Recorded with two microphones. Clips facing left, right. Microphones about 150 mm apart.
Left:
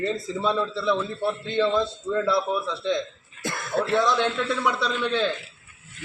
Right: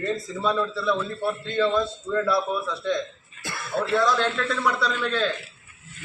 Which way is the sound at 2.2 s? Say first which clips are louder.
Left 1 dB; 20° left (ahead or behind).